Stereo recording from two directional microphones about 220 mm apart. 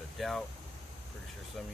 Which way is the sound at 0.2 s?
Centre (ahead or behind).